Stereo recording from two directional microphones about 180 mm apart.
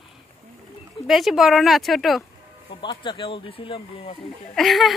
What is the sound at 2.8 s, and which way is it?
Speech, 25° left (ahead or behind).